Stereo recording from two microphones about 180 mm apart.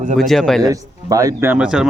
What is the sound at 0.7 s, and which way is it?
Speech, 20° right (ahead or behind).